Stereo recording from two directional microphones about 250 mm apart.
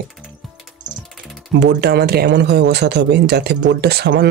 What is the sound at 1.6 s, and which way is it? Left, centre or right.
Speech, right.